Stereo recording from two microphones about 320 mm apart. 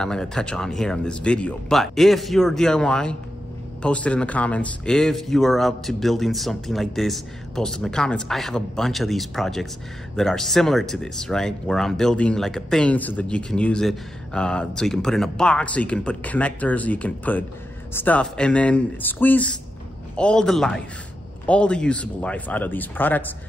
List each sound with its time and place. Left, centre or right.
0.0 s speech: centre